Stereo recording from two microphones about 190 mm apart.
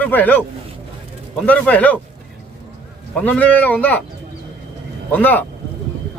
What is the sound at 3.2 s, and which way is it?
Speech, 10° left (ahead or behind).